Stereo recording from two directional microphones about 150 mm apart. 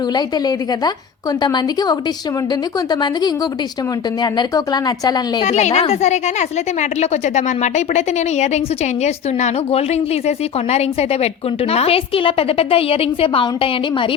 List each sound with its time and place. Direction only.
0.1 s speech: 25° left (ahead or behind)
5.5 s a woman's voice: 50° left (ahead or behind)